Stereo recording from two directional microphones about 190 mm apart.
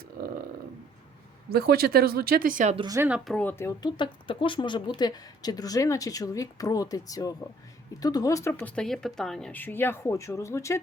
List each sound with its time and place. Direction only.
1.5 s speech: 55° right (ahead or behind)
2.7 s speech: 20° right (ahead or behind)
3.1 s a woman's voice: 5° left (ahead or behind)